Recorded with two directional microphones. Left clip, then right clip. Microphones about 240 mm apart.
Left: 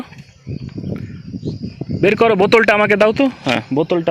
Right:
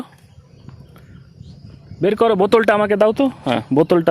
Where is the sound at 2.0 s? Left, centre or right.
Centre.